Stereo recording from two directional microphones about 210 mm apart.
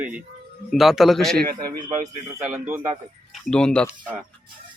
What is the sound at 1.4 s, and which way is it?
Speech, 45° right (ahead or behind).